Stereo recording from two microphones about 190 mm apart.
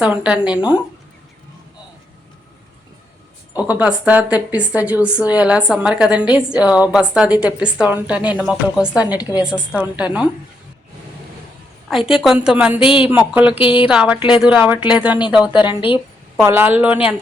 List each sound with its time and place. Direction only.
0.0 s a woman's voice: 5° right (ahead or behind)
3.7 s a woman's voice: 10° right (ahead or behind)
11.9 s a woman's voice: centre (ahead or behind)
12.8 s a woman's voice: 25° left (ahead or behind)
13.1 s a woman's voice: 10° right (ahead or behind)
13.6 s a woman's voice: 25° left (ahead or behind)
13.8 s a woman's voice: 5° right (ahead or behind)
15.6 s a woman's voice: 25° left (ahead or behind)
16.4 s a woman's voice: 10° right (ahead or behind)